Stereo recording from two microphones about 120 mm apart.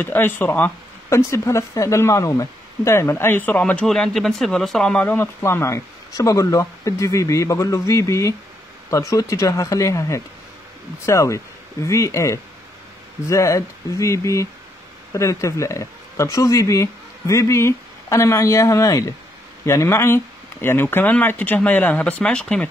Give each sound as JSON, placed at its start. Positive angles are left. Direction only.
{"t": 0.0, "sound": "speech", "side_deg": 15}
{"t": 3.8, "sound": "speech", "side_deg": 5}